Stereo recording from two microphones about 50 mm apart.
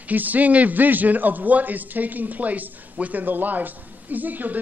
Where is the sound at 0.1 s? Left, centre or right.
Right.